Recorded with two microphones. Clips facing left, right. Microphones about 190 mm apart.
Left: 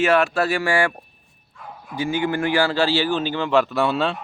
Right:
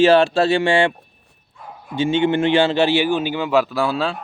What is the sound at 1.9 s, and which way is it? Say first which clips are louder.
A man's voice: right 5 dB; 25° right (ahead or behind).